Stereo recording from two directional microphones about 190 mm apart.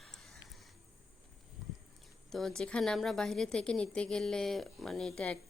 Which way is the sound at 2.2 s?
Centre (ahead or behind).